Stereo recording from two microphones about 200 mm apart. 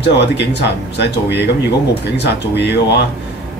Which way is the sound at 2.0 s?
55° left (ahead or behind).